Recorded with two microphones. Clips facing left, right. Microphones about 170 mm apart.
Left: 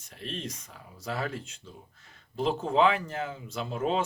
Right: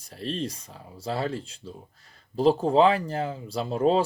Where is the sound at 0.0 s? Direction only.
35° right (ahead or behind).